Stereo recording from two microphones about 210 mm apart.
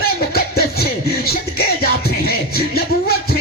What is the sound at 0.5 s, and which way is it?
Music, 45° left (ahead or behind).